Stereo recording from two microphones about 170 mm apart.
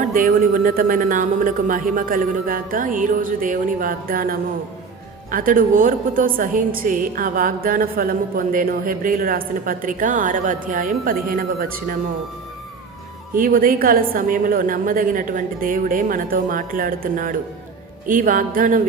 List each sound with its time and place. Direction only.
0.1 s a woman's voice: 55° right (ahead or behind)
13.3 s a woman's voice: 55° right (ahead or behind)